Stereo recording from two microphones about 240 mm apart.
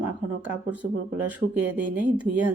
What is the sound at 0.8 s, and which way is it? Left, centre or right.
Speech, right.